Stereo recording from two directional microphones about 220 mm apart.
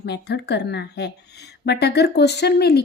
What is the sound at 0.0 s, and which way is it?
Speech, 50° left (ahead or behind).